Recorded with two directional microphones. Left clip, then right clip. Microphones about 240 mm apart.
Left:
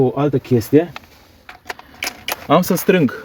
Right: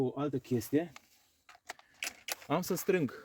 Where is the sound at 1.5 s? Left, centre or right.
Right.